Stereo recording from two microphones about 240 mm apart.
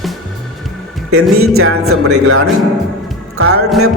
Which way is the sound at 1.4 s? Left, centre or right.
Right.